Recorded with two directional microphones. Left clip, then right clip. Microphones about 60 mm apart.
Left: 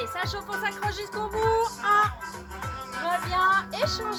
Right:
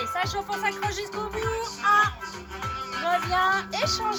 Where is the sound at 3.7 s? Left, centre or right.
Left.